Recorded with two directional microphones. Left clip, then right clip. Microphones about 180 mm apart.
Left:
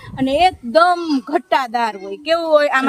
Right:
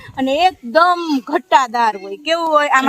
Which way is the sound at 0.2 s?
35° left (ahead or behind).